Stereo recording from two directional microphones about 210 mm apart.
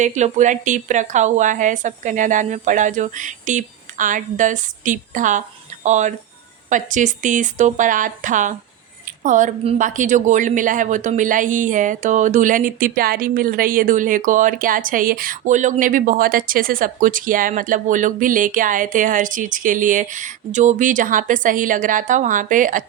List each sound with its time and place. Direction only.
0.0 s a woman's voice: 35° right (ahead or behind)